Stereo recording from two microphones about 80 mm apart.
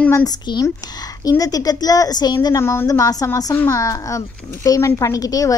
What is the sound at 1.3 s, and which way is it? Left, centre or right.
Speech, left.